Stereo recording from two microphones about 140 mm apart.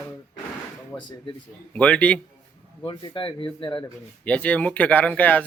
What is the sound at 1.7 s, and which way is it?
Speech, 10° left (ahead or behind).